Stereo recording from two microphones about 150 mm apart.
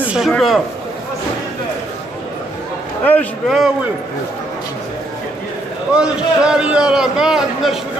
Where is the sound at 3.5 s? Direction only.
Centre (ahead or behind).